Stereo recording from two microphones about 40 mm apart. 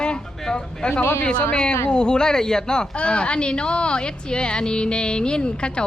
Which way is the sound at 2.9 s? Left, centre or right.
Left.